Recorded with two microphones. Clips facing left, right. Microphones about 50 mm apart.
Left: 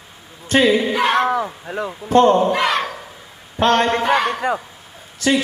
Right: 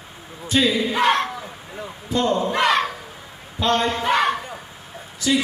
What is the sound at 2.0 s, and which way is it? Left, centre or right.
Speech, left.